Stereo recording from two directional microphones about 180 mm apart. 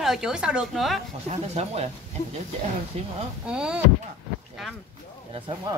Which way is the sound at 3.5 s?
5° right (ahead or behind).